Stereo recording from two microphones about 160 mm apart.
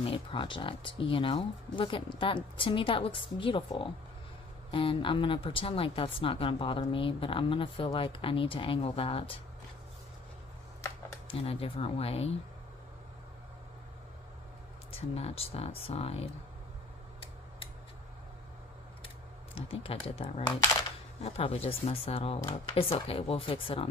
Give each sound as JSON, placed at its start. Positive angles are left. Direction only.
{"t": 0.0, "sound": "speech", "side_deg": 35}
{"t": 11.2, "sound": "speech", "side_deg": 35}
{"t": 14.9, "sound": "speech", "side_deg": 40}
{"t": 19.5, "sound": "speech", "side_deg": 35}